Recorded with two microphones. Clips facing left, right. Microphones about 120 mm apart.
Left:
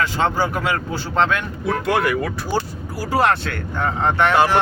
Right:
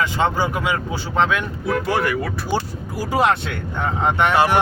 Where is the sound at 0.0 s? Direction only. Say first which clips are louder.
Even; 15° right (ahead or behind).